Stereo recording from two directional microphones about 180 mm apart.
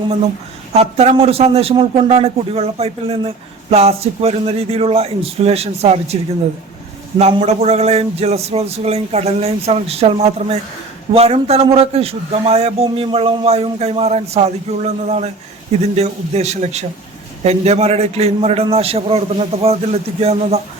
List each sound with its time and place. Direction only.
0.7 s a man's voice: 35° right (ahead or behind)
7.2 s a man's voice: 35° right (ahead or behind)